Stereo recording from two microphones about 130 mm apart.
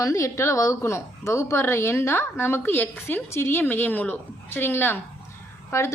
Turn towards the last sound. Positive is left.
turn(degrees=20)  # may be behind; listen again after turning